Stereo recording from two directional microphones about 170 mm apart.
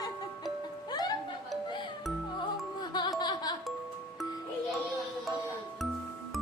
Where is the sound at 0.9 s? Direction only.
25° left (ahead or behind).